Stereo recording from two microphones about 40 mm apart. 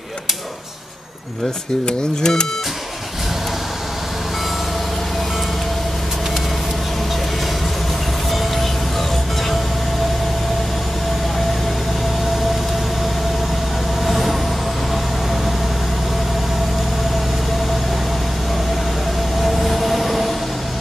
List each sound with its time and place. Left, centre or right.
1.9 s speech: centre
14.0 s vehicle: centre
19.4 s vehicle: centre